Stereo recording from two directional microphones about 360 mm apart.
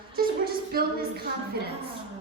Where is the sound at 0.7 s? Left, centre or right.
Right.